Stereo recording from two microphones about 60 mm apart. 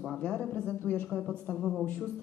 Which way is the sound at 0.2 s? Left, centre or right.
Centre.